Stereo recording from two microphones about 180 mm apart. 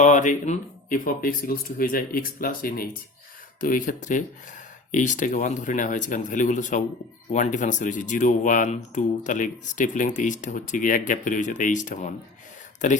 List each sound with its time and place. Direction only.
0.0 s speech: 45° left (ahead or behind)